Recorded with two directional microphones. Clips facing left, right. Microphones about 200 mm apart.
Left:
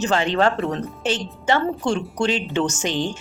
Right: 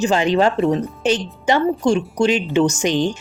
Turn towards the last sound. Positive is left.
turn(degrees=-15)  # may be behind; listen again after turning